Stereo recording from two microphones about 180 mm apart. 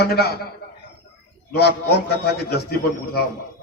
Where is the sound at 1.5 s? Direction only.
60° left (ahead or behind).